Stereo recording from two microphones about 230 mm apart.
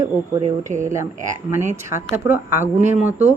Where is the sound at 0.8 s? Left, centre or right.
Centre.